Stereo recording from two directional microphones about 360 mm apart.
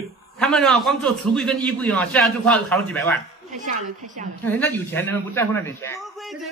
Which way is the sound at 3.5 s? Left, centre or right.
Right.